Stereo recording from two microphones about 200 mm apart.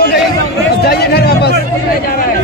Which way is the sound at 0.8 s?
50° left (ahead or behind).